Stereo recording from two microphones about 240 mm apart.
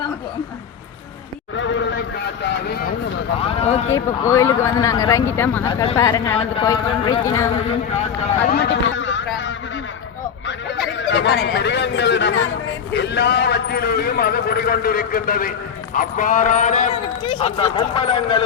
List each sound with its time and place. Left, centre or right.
1.5 s a sound: left
2.6 s vehicle: left
3.4 s a sound: left
3.9 s speech: centre
6.3 s a man's voice: left
8.4 s a man's voice: left
11.1 s a man's voice: left